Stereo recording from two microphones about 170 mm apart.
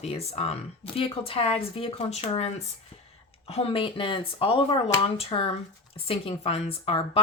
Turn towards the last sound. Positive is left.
turn(degrees=35)  # may be behind; listen again after turning